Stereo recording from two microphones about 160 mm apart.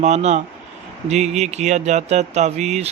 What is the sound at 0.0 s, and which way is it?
Speech, 45° right (ahead or behind).